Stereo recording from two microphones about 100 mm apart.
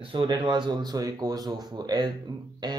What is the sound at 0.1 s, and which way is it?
Speech, 55° right (ahead or behind).